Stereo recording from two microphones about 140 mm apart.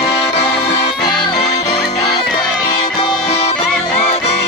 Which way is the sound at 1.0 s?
30° left (ahead or behind).